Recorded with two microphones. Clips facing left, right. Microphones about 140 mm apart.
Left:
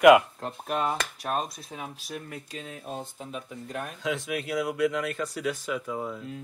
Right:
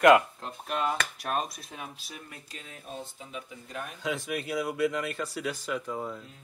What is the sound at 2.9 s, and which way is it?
Speech, 50° left (ahead or behind).